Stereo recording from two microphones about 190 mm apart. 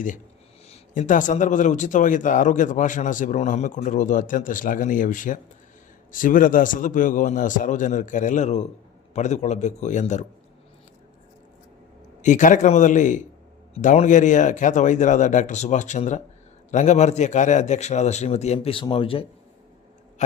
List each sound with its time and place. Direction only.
0.7 s a man's voice: 40° left (ahead or behind)
12.2 s a man's voice: 40° left (ahead or behind)